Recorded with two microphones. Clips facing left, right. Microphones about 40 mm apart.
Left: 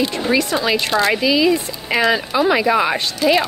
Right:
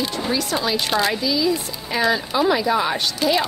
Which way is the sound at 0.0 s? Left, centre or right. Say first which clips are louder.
Left 5 dB; left.